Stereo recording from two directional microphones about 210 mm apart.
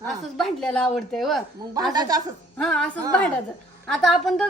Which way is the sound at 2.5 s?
5° left (ahead or behind).